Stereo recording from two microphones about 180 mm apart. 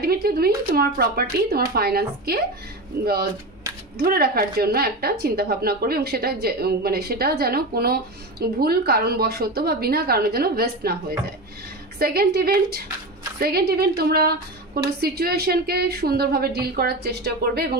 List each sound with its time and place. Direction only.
0.0 s speech: 60° right (ahead or behind)
4.0 s speech: 55° right (ahead or behind)